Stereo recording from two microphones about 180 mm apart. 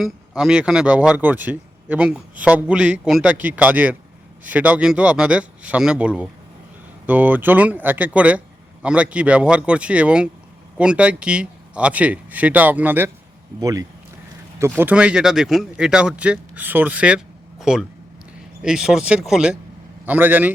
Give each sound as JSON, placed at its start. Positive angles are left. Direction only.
{"t": 0.0, "sound": "speech", "side_deg": 0}